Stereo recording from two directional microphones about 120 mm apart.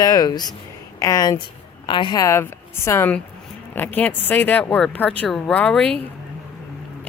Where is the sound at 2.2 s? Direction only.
25° left (ahead or behind); by 6.0 s 10° left (ahead or behind).